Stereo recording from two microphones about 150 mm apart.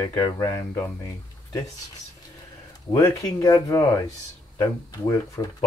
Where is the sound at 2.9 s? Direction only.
20° left (ahead or behind).